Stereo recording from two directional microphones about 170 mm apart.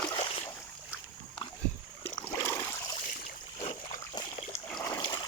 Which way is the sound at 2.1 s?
20° left (ahead or behind).